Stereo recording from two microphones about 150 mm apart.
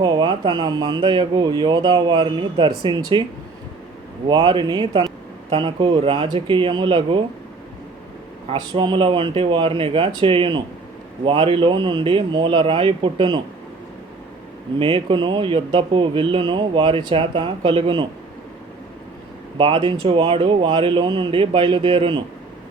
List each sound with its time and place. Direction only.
0.0 s speech: 30° right (ahead or behind)
4.3 s speech: 30° right (ahead or behind)
8.5 s speech: 35° right (ahead or behind)
14.8 s speech: 35° right (ahead or behind)
19.5 s speech: 35° right (ahead or behind)